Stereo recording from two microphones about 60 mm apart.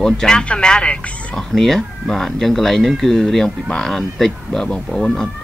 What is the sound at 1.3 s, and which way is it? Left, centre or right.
Speech, centre.